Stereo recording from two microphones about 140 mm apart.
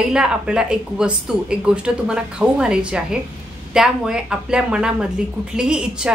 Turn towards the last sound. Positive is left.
turn(degrees=-5)  # may be behind; listen again after turning